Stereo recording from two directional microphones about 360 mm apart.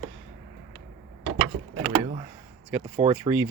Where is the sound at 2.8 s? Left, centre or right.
Centre.